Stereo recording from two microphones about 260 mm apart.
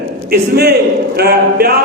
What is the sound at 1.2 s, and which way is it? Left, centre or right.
Speech, right.